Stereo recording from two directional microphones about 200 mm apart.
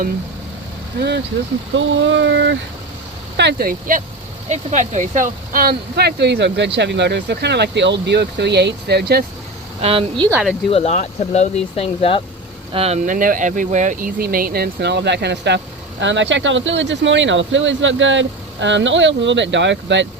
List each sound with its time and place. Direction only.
1.7 s speech: 70° right (ahead or behind)
9.8 s speech: 25° right (ahead or behind)
10.7 s speech: 30° left (ahead or behind)
12.7 s speech: 30° right (ahead or behind); by 20.1 s 65° right (ahead or behind)